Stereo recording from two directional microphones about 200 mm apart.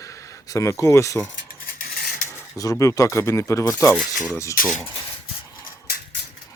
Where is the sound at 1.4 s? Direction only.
45° left (ahead or behind).